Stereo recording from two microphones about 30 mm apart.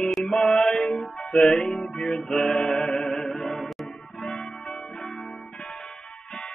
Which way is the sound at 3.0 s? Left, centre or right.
Centre.